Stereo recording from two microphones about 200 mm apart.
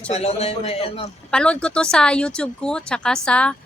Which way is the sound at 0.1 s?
30° left (ahead or behind).